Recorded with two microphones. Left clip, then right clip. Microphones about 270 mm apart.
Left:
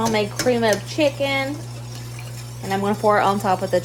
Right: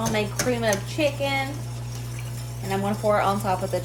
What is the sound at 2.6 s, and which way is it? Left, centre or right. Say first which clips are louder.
Speech: left 5 dB; left.